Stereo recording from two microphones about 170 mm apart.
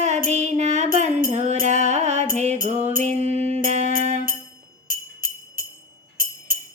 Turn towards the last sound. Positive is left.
turn(degrees=-55)  # may be behind; listen again after turning